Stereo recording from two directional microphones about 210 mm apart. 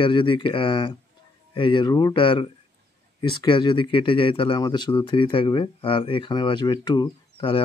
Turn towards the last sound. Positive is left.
turn(degrees=25)  # may be behind; listen again after turning